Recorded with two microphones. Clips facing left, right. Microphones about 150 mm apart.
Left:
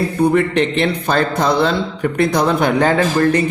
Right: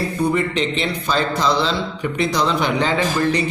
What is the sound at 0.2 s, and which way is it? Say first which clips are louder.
Speech: left 6 dB; 60° left (ahead or behind).